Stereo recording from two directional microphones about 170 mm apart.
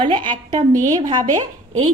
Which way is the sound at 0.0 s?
30° right (ahead or behind).